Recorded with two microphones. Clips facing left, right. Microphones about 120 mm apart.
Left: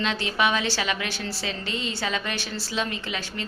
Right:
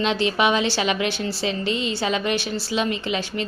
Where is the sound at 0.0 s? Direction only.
20° right (ahead or behind).